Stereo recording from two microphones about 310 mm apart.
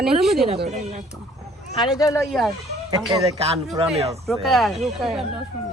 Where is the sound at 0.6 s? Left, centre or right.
Right.